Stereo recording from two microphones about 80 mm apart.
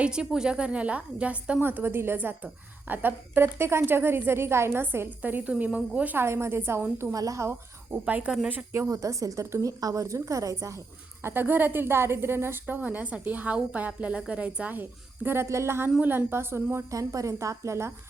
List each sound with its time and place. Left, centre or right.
0.0 s a woman's voice: centre
1.6 s a woman's voice: right
6.2 s a woman's voice: right
7.1 s a woman's voice: right
8.0 s a woman's voice: centre
8.9 s a woman's voice: right
11.2 s a woman's voice: right
16.9 s a woman's voice: right